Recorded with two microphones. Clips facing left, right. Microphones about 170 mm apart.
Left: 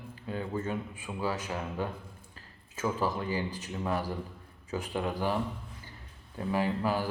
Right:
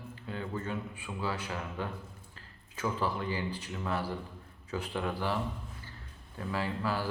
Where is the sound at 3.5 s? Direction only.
15° left (ahead or behind).